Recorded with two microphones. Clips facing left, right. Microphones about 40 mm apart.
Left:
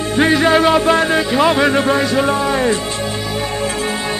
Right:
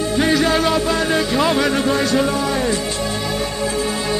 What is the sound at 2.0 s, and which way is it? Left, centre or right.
Speech, centre.